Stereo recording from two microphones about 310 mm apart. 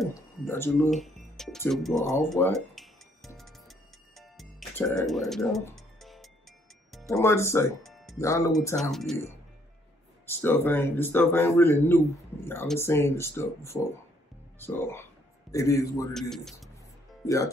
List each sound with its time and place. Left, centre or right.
0.0 s speech: centre
2.7 s music: centre
5.0 s speech: centre
10.2 s a man's voice: centre